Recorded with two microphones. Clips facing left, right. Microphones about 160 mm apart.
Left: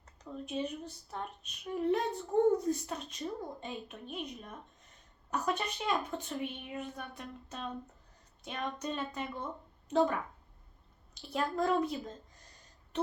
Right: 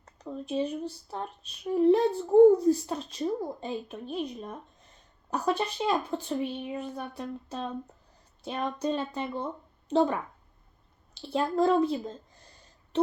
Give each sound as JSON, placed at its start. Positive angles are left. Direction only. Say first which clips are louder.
{"t": 0.4, "sound": "speech", "louder": "right 7 dB", "side_deg": -30}
{"t": 11.1, "sound": "a woman's voice", "louder": "right 6 dB", "side_deg": -30}